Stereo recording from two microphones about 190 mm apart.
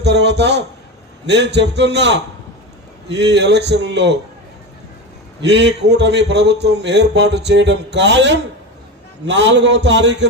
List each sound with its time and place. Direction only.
0.0 s a sound: 65° right (ahead or behind)
1.3 s speech: 65° right (ahead or behind)
5.4 s a man's voice: 65° right (ahead or behind)